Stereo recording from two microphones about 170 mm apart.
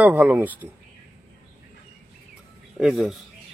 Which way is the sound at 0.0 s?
10° right (ahead or behind).